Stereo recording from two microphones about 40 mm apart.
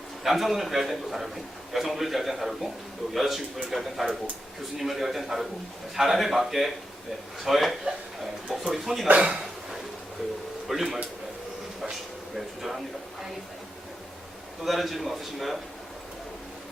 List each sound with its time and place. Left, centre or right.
0.2 s a man's voice: centre
9.0 s speech: right
10.7 s a man's voice: centre
14.6 s a man's voice: centre